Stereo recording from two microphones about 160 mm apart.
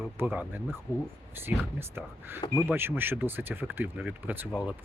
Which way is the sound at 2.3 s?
20° left (ahead or behind).